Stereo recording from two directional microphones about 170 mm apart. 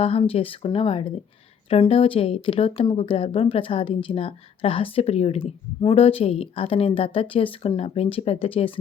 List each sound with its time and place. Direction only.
0.0 s speech: 35° left (ahead or behind)